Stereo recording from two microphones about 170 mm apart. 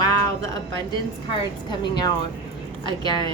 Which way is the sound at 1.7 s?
25° left (ahead or behind).